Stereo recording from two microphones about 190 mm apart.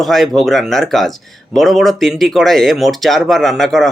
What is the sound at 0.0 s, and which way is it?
Speech, centre (ahead or behind).